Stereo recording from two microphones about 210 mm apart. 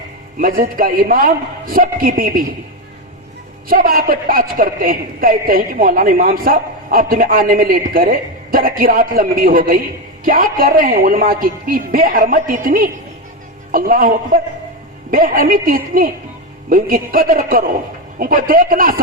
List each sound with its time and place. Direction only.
0.3 s a woman's voice: 45° right (ahead or behind)
3.7 s a woman's voice: 45° right (ahead or behind)